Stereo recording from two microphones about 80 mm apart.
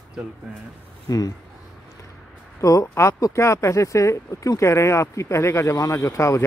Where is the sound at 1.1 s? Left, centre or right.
Left.